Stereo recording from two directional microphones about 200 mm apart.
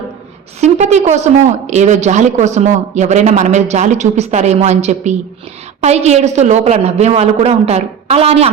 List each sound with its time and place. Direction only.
0.6 s speech: 35° right (ahead or behind)